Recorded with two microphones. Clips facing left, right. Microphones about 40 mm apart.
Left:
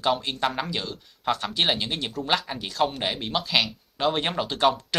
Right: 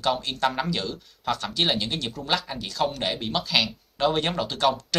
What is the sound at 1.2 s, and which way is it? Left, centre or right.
Speech, centre.